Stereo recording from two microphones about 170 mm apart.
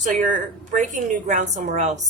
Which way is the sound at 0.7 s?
45° right (ahead or behind).